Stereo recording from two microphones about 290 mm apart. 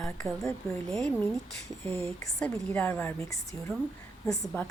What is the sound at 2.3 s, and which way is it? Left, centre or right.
Speech, centre.